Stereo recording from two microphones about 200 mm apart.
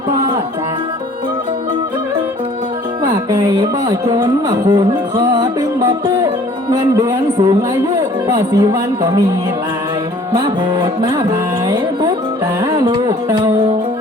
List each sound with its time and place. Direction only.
3.2 s music: 20° right (ahead or behind)
10.3 s music: 20° right (ahead or behind)
12.7 s music: 20° right (ahead or behind)